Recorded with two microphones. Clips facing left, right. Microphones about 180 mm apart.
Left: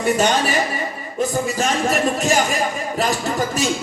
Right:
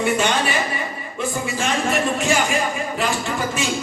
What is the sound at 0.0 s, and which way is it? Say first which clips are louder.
A man's voice: left 2 dB; 40° left (ahead or behind).